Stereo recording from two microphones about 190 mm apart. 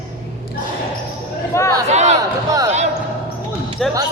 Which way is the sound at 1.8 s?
35° right (ahead or behind).